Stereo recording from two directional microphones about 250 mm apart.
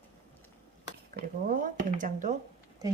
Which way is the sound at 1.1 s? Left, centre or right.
Right.